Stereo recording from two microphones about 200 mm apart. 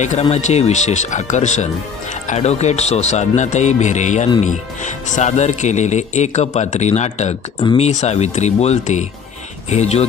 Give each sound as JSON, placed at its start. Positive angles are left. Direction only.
{"t": 0.0, "sound": "speech", "side_deg": 35}
{"t": 7.6, "sound": "speech", "side_deg": 25}
{"t": 7.9, "sound": "speech", "side_deg": 35}